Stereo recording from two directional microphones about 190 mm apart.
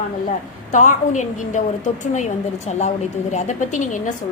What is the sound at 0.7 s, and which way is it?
A woman's voice, 40° left (ahead or behind).